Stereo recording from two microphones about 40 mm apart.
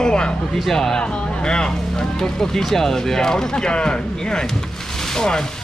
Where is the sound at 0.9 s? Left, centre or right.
Left.